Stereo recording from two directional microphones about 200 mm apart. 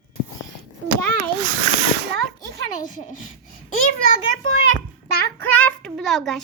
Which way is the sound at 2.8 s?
40° left (ahead or behind).